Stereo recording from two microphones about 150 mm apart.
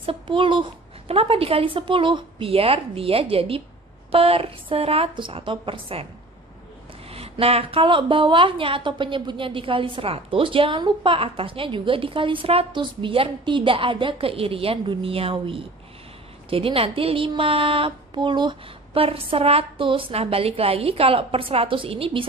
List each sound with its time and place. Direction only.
0.0 s a woman's voice: 35° right (ahead or behind)
7.1 s a woman's voice: 40° right (ahead or behind)